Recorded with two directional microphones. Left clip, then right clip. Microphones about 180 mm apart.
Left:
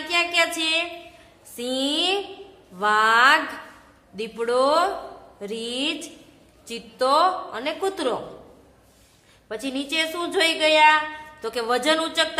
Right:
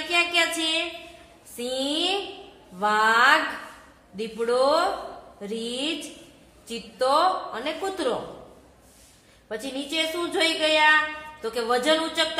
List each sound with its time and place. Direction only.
0.1 s a sound: 15° left (ahead or behind)
1.6 s a woman's voice: 25° left (ahead or behind)
9.5 s a woman's voice: 20° left (ahead or behind)